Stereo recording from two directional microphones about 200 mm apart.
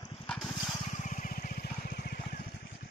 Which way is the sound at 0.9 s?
40° left (ahead or behind).